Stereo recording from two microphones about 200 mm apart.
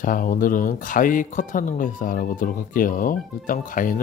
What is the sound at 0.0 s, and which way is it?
Speech, 45° left (ahead or behind).